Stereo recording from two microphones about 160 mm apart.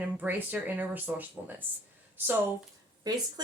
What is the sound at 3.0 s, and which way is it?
Speech, 25° right (ahead or behind).